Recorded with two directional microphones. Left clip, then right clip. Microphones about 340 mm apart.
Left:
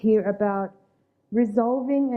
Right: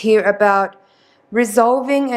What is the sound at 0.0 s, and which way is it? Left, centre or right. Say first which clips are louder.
A woman's voice: right 9 dB; centre.